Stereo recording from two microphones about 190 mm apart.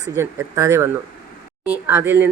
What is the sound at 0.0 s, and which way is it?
Speech, 15° right (ahead or behind).